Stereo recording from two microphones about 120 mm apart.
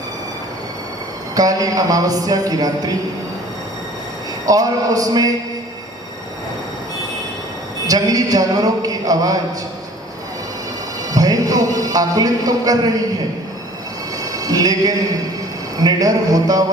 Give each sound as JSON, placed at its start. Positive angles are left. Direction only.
{"t": 1.4, "sound": "speech", "side_deg": -30}
{"t": 4.4, "sound": "speech", "side_deg": -30}
{"t": 7.9, "sound": "speech", "side_deg": -30}
{"t": 11.1, "sound": "speech", "side_deg": -30}
{"t": 14.3, "sound": "a sound", "side_deg": -30}
{"t": 15.8, "sound": "speech", "side_deg": -30}